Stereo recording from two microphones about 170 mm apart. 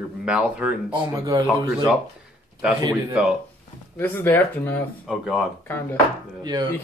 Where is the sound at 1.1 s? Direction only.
25° right (ahead or behind).